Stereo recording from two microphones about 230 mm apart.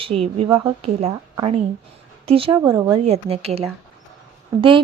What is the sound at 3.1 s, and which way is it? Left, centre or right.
Speech, right.